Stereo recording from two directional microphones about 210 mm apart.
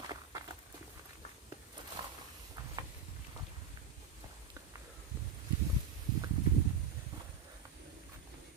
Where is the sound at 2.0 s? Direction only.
20° right (ahead or behind).